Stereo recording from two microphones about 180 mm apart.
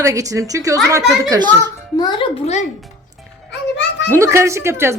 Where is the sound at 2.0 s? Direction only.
25° left (ahead or behind).